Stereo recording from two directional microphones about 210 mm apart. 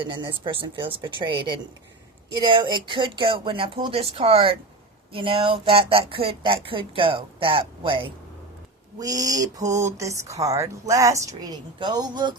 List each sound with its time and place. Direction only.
0.0 s speech: 20° right (ahead or behind)